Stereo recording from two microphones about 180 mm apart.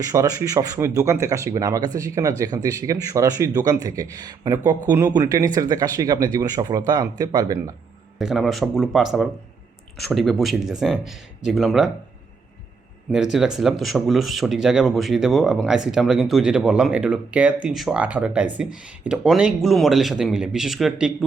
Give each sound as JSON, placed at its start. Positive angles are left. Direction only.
{"t": 0.0, "sound": "speech", "side_deg": -20}
{"t": 8.2, "sound": "speech", "side_deg": 0}
{"t": 13.1, "sound": "speech", "side_deg": -5}